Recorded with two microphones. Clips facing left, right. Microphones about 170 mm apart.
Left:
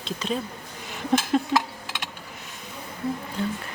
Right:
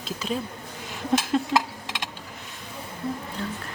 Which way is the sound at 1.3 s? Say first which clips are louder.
Left 2 dB; 5° left (ahead or behind).